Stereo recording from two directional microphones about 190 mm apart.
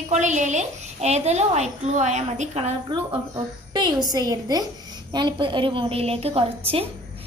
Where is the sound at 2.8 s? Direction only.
20° right (ahead or behind).